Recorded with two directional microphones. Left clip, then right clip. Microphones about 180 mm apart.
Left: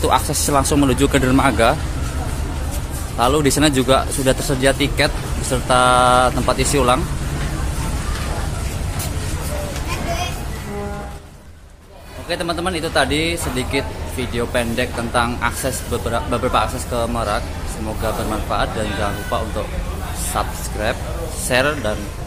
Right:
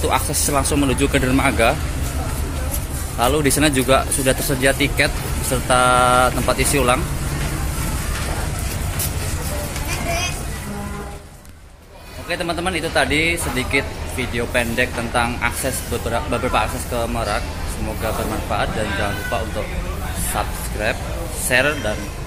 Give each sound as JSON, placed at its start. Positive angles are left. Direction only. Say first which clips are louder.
{"t": 0.0, "sound": "speech", "louder": "left 3 dB", "side_deg": 20}
{"t": 3.2, "sound": "speech", "louder": "left 2 dB", "side_deg": 15}
{"t": 12.3, "sound": "speech", "louder": "left 1 dB", "side_deg": 10}
{"t": 20.3, "sound": "speech", "louder": "left 2 dB", "side_deg": 15}